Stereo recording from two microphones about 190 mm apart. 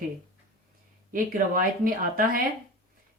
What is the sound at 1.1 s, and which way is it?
A woman's voice, 50° right (ahead or behind).